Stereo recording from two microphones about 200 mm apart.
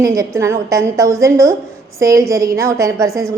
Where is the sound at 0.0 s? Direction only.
15° right (ahead or behind).